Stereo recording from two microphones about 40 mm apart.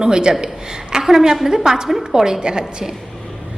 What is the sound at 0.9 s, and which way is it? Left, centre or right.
A woman's voice, centre.